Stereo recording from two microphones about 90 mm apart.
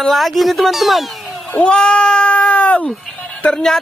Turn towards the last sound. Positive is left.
turn(degrees=5)  # may be behind; listen again after turning